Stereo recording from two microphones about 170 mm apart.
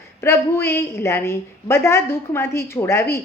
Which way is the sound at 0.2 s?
15° left (ahead or behind).